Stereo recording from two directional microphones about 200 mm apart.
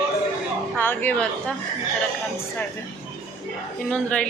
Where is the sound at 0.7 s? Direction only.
10° left (ahead or behind).